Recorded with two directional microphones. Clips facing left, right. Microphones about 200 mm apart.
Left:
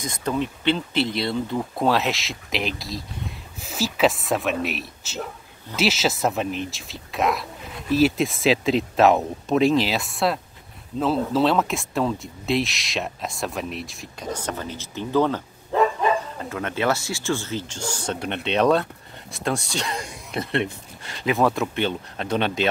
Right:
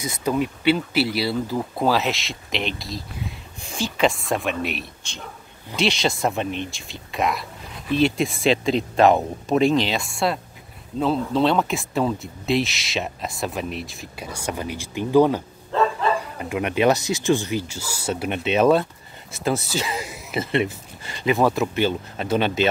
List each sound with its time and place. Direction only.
0.0 s speech: 10° right (ahead or behind)
15.7 s bow-wow: 15° left (ahead or behind)
16.3 s speech: 15° right (ahead or behind)